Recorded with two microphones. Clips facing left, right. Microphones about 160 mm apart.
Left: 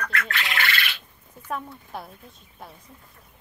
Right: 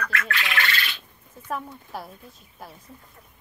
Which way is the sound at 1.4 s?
Centre (ahead or behind).